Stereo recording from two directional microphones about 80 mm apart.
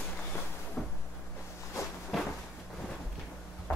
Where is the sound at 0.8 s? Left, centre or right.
Centre.